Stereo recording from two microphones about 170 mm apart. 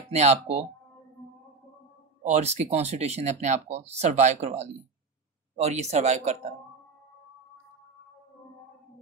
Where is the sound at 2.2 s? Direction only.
40° right (ahead or behind).